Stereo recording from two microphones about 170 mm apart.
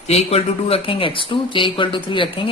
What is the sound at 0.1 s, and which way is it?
Speech, 35° left (ahead or behind).